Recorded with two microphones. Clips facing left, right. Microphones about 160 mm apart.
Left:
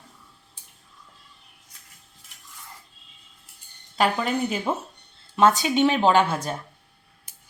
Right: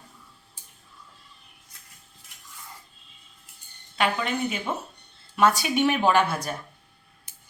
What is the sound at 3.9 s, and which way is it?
Speech, 35° left (ahead or behind).